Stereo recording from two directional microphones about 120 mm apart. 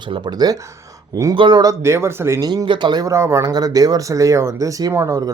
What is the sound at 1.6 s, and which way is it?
Speech, 25° right (ahead or behind).